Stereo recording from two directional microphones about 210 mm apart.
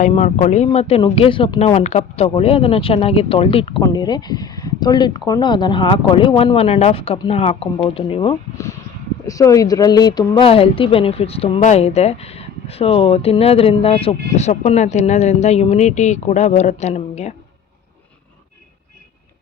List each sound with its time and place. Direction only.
0.0 s speech: 35° left (ahead or behind)
9.2 s speech: 15° left (ahead or behind); by 17.3 s 30° left (ahead or behind)